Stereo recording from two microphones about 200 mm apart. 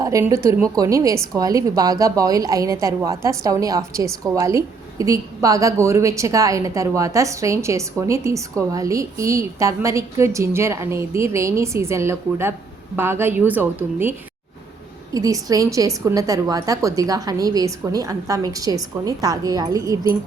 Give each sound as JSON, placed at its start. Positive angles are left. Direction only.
{"t": 0.0, "sound": "a woman's voice", "side_deg": -15}
{"t": 15.1, "sound": "a woman's voice", "side_deg": -15}